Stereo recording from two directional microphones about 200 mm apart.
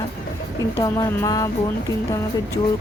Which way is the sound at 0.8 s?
15° left (ahead or behind).